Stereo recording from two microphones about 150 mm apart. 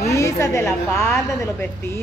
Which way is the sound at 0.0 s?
20° left (ahead or behind).